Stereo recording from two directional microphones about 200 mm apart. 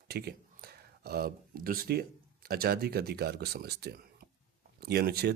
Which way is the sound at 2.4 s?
50° right (ahead or behind).